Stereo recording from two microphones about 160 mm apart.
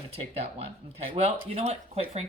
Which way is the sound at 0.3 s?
40° right (ahead or behind).